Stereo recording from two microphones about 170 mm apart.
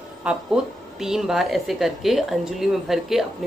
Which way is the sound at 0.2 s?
5° right (ahead or behind).